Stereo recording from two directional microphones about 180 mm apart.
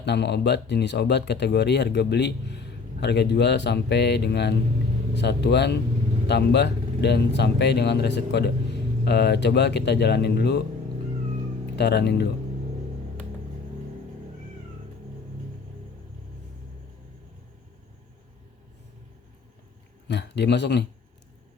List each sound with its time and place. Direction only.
0.0 s speech: 70° left (ahead or behind)
11.8 s speech: 70° left (ahead or behind)
20.1 s speech: 70° left (ahead or behind)